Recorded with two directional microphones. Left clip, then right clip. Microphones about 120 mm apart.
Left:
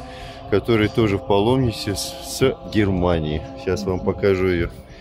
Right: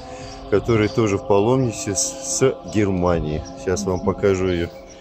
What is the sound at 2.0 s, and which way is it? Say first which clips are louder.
Speech: right 4 dB; 90° left.